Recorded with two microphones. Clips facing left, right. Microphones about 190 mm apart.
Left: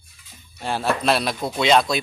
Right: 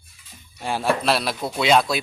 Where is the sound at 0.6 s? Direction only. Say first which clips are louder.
Right 1 dB; 10° right (ahead or behind).